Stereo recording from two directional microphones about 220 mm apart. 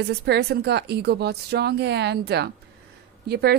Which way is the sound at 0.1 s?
50° right (ahead or behind).